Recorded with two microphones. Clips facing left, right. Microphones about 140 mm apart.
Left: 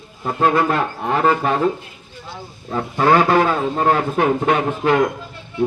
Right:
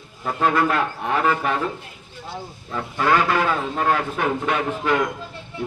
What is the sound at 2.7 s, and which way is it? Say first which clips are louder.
A man's voice: left 5 dB; 35° left (ahead or behind).